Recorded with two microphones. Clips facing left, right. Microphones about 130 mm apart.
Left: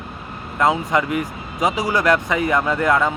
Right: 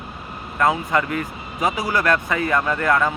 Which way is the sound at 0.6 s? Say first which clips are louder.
Left 1 dB; 20° left (ahead or behind).